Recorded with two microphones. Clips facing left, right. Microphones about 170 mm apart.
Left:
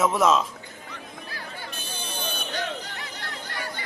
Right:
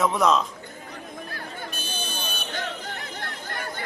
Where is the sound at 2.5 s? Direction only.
50° right (ahead or behind).